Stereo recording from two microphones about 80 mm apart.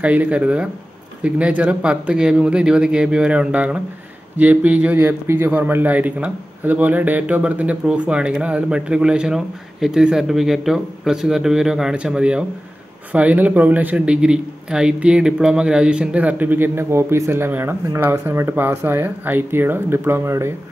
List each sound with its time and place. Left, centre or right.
0.0 s a man's voice: centre; by 20.5 s right